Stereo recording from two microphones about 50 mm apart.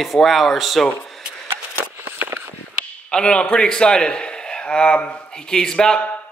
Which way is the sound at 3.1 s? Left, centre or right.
Centre.